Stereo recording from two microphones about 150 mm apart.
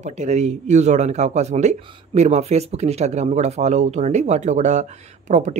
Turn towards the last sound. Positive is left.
turn(degrees=-50)  # may be behind; listen again after turning